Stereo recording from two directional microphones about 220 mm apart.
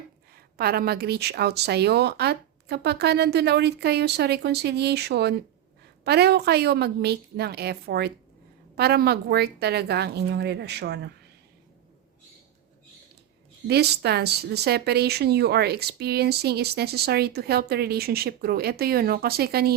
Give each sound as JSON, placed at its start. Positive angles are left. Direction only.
{"t": 0.3, "sound": "speech", "side_deg": -45}
{"t": 13.7, "sound": "speech", "side_deg": -50}